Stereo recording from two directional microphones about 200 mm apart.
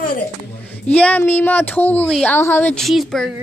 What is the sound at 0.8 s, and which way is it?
A woman's voice, 5° left (ahead or behind).